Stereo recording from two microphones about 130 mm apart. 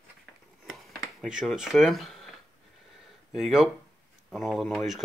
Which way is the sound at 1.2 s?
5° right (ahead or behind).